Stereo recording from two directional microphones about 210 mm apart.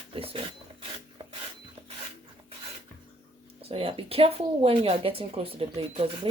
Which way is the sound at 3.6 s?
25° right (ahead or behind).